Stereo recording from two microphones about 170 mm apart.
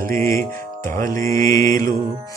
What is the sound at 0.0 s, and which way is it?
Speech, 15° left (ahead or behind).